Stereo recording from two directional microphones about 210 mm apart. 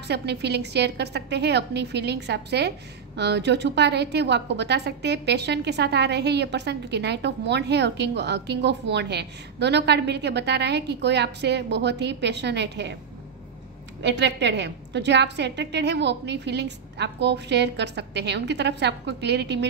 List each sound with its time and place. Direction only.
0.1 s a woman's voice: 50° right (ahead or behind)
14.0 s a woman's voice: 55° right (ahead or behind)